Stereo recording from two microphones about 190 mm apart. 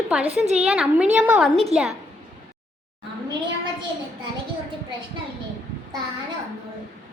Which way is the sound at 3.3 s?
25° right (ahead or behind).